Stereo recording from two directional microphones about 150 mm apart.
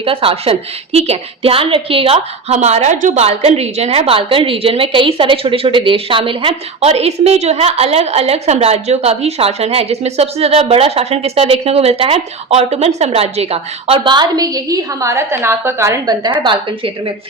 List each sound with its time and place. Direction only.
0.0 s a woman's voice: 35° right (ahead or behind); by 16.3 s 20° right (ahead or behind)
16.4 s a woman's voice: 30° right (ahead or behind)